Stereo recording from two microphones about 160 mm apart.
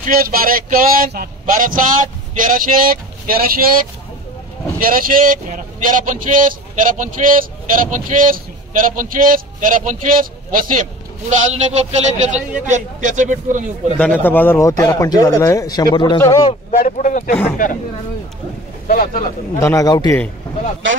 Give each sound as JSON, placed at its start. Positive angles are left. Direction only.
{"t": 0.0, "sound": "a man's voice", "side_deg": -65}
{"t": 11.5, "sound": "a man's voice", "side_deg": -40}
{"t": 13.9, "sound": "a man's voice", "side_deg": 10}
{"t": 16.7, "sound": "speech", "side_deg": 50}
{"t": 18.9, "sound": "speech", "side_deg": 55}
{"t": 19.6, "sound": "a man's voice", "side_deg": 20}